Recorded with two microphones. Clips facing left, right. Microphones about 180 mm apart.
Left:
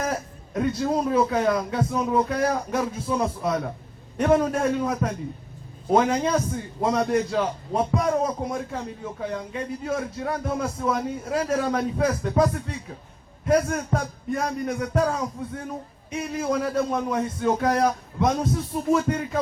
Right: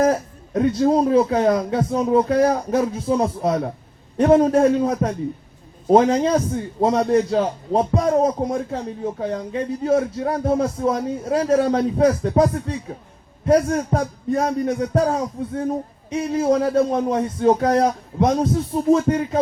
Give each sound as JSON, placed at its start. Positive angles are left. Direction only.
{"t": 0.0, "sound": "a man's voice", "side_deg": -30}